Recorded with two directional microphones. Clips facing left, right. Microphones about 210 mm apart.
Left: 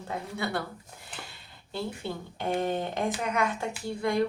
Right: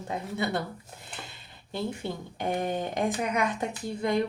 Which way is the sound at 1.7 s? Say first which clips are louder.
Right 2 dB; 15° right (ahead or behind).